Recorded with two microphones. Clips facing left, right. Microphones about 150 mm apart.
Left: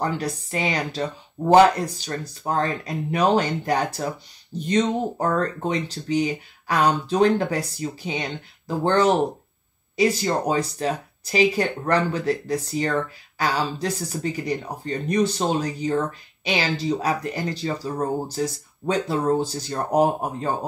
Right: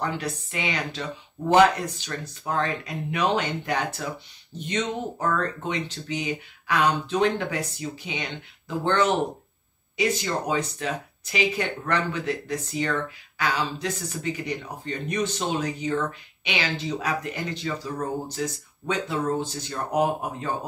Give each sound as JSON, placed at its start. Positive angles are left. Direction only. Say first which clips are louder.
{"t": 0.0, "sound": "speech", "louder": "left 3 dB", "side_deg": 40}